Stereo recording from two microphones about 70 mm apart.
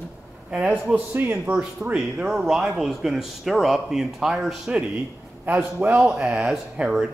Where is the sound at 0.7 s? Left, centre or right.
Right.